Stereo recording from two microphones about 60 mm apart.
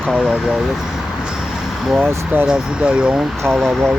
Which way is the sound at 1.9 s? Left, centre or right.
Right.